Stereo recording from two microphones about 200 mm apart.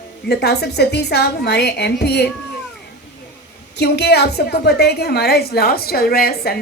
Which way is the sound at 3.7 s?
55° left (ahead or behind).